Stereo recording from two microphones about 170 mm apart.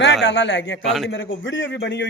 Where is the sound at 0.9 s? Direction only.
Centre (ahead or behind).